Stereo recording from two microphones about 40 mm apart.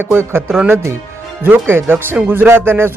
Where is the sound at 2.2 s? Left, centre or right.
Right.